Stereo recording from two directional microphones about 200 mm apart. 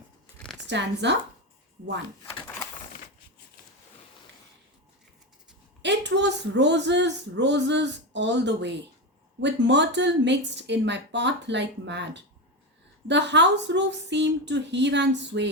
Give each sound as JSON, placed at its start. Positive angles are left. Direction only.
{"t": 0.7, "sound": "speech", "side_deg": -60}
{"t": 5.8, "sound": "speech", "side_deg": -60}